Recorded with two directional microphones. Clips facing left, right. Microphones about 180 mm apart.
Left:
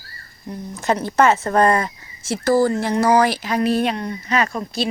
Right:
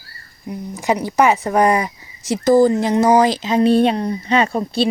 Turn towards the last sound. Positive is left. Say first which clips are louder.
# right 5 dB
turn(degrees=-30)  # may be behind; listen again after turning